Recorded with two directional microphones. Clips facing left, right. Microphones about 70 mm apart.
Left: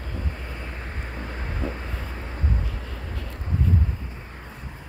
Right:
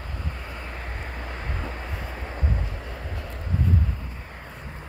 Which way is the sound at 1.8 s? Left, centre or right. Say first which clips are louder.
Even; centre.